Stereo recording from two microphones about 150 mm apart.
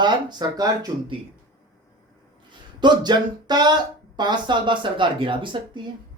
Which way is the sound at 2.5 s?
30° right (ahead or behind).